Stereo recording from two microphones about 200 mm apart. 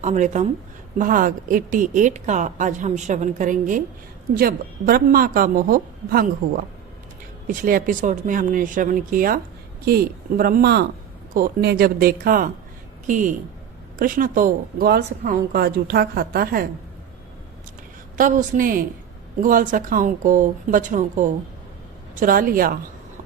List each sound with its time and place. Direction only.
0.0 s speech: 35° right (ahead or behind)
7.4 s speech: 45° right (ahead or behind)
18.2 s speech: 40° right (ahead or behind)